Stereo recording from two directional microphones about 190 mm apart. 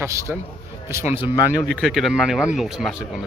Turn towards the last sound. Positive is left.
turn(degrees=-5)  # may be behind; listen again after turning